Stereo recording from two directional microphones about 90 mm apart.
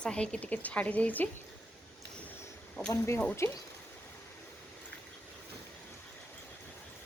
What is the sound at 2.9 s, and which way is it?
Speech, 30° left (ahead or behind).